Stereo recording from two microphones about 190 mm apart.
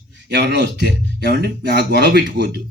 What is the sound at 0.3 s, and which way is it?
Speech, 60° right (ahead or behind).